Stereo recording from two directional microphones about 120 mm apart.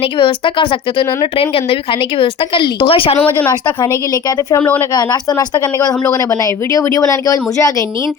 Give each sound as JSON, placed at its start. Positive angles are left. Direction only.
{"t": 0.2, "sound": "a woman's voice", "side_deg": 45}
{"t": 3.5, "sound": "speech", "side_deg": 35}